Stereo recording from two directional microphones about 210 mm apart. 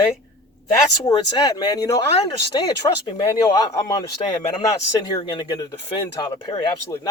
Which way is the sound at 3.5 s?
20° left (ahead or behind).